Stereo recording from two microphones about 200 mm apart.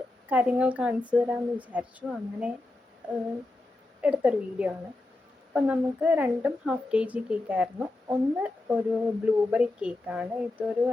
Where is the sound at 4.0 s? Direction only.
5° right (ahead or behind).